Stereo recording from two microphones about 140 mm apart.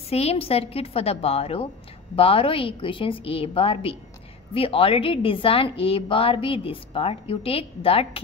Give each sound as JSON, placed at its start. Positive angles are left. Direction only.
{"t": 0.1, "sound": "a woman's voice", "side_deg": 45}